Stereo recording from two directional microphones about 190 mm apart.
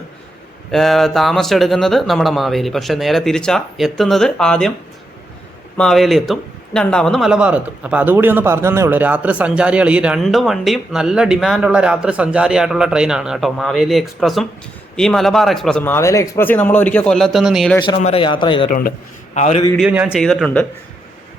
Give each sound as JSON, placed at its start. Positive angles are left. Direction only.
{"t": 0.7, "sound": "speech", "side_deg": 0}
{"t": 5.7, "sound": "speech", "side_deg": 5}
{"t": 17.8, "sound": "a man's voice", "side_deg": 30}
{"t": 18.7, "sound": "a man's voice", "side_deg": 45}
{"t": 19.7, "sound": "speech", "side_deg": -10}
{"t": 20.1, "sound": "speech", "side_deg": 5}